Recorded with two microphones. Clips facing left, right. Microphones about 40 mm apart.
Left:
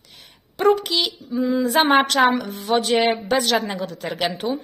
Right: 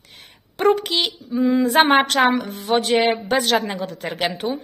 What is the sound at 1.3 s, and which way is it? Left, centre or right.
Speech, right.